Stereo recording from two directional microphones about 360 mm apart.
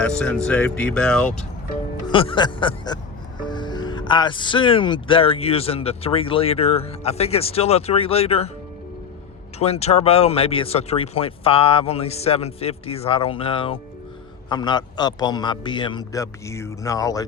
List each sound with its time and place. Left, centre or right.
0.0 s speech: centre
2.0 s speech: centre
9.6 s speech: centre